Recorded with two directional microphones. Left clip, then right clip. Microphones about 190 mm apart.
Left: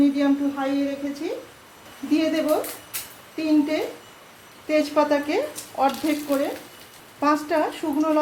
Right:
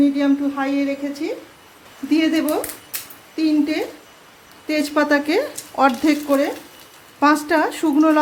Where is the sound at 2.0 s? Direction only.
40° right (ahead or behind).